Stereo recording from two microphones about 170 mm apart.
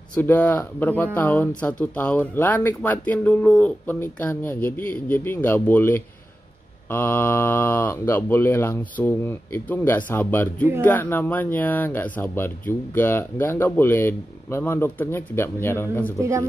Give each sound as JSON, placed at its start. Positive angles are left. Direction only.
{"t": 0.1, "sound": "speech", "side_deg": 10}
{"t": 16.2, "sound": "speech", "side_deg": -15}